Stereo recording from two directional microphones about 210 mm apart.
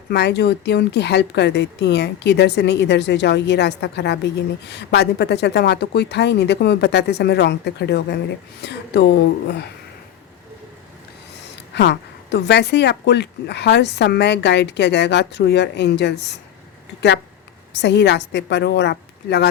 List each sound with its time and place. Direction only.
0.1 s speech: 50° left (ahead or behind)
11.5 s a woman's voice: 55° left (ahead or behind)
17.7 s a woman's voice: 55° left (ahead or behind)